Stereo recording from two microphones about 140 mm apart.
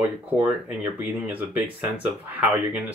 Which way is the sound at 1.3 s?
10° right (ahead or behind).